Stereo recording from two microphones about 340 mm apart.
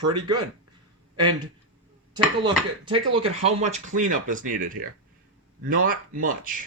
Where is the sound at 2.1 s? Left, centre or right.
Centre.